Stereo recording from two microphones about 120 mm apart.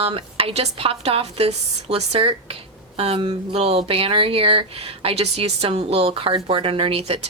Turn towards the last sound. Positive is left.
turn(degrees=-55)  # may be behind; listen again after turning